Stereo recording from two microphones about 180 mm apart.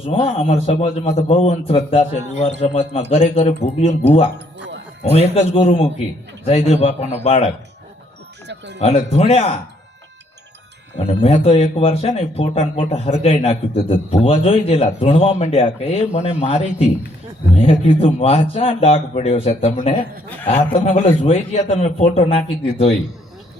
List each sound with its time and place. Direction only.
0.0 s speech: 30° left (ahead or behind)
8.4 s speech: 75° right (ahead or behind)
8.8 s speech: 35° left (ahead or behind)
11.0 s speech: 35° left (ahead or behind)